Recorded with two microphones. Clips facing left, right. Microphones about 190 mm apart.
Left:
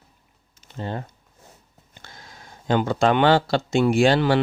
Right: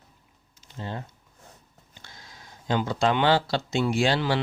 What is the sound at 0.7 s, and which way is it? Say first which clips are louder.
Speech: left 5 dB; 55° left (ahead or behind).